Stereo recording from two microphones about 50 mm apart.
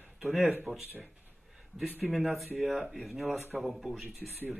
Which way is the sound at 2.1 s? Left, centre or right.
Centre.